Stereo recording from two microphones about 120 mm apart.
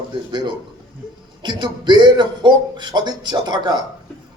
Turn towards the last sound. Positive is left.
turn(degrees=-35)  # may be behind; listen again after turning